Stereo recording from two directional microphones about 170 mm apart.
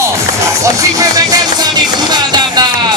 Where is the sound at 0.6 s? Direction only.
20° right (ahead or behind).